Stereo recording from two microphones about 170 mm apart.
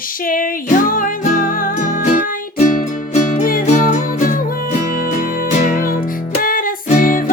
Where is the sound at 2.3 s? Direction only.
45° left (ahead or behind).